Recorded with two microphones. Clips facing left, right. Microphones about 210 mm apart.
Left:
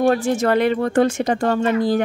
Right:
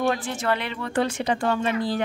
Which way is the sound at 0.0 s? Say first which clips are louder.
Left 8 dB; 40° left (ahead or behind).